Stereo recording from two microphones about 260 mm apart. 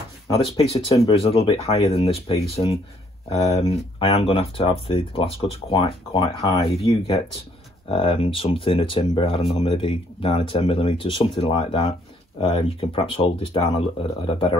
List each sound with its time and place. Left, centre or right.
0.6 s speech: left